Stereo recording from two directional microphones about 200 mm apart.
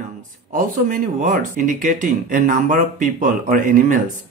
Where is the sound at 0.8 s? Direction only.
40° right (ahead or behind).